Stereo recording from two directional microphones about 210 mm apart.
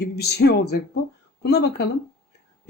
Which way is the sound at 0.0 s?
50° left (ahead or behind).